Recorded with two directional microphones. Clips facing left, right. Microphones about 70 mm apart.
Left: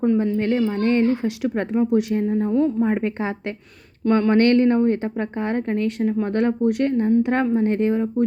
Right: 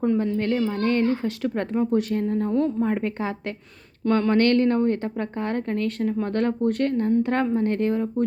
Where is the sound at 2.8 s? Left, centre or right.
Left.